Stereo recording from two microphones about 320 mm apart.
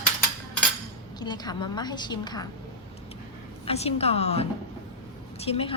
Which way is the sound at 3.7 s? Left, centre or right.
Centre.